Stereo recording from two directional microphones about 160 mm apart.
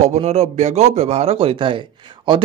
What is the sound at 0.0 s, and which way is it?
Speech, 45° right (ahead or behind).